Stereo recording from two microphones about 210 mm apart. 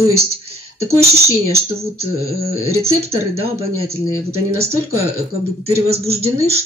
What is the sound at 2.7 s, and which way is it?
Speech, 30° right (ahead or behind).